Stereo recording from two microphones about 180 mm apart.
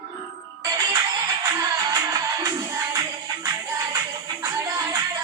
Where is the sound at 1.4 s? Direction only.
20° right (ahead or behind).